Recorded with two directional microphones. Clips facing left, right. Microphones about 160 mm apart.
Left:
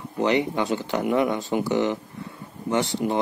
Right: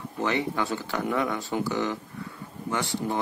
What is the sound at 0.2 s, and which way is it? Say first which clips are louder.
A man's voice: left 5 dB; 20° left (ahead or behind).